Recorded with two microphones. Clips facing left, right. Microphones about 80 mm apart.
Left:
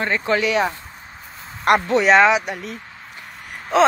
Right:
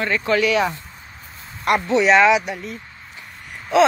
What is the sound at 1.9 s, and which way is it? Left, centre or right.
Speech, left.